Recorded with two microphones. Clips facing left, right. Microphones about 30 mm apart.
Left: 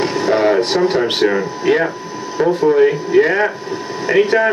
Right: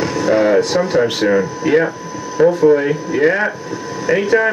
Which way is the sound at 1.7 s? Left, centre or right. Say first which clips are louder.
Even; left.